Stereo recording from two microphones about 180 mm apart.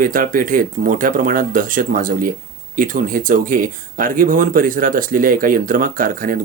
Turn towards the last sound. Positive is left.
turn(degrees=-50)  # may be behind; listen again after turning